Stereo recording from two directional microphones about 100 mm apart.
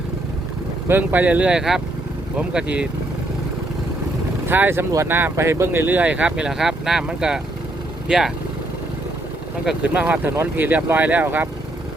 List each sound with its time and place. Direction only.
0.9 s speech: 20° right (ahead or behind)
4.4 s speech: 20° right (ahead or behind); by 8.3 s 5° right (ahead or behind)
9.6 s speech: 15° right (ahead or behind)